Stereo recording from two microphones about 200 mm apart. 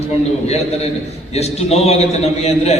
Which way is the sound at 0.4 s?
30° left (ahead or behind).